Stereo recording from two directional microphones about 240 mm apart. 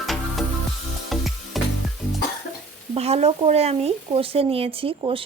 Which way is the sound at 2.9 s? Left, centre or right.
Right.